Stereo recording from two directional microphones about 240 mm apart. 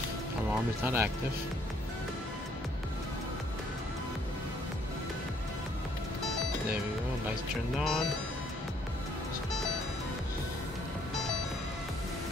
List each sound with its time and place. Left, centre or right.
0.8 s speech: centre
7.8 s speech: centre